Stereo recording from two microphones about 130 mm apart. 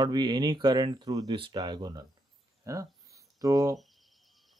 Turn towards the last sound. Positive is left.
turn(degrees=-30)  # may be behind; listen again after turning